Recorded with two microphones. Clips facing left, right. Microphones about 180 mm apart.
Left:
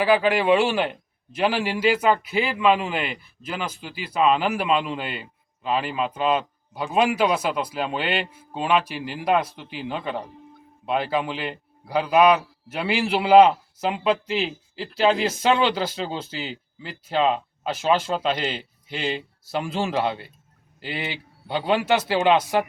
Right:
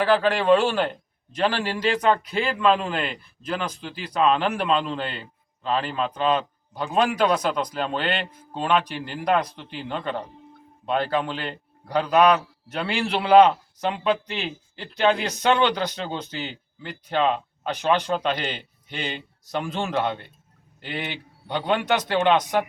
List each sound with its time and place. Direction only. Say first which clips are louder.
0.0 s a man's voice: left 1 dB; 10° left (ahead or behind)